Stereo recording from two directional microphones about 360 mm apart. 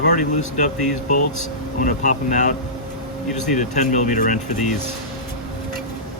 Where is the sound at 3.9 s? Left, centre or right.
Left.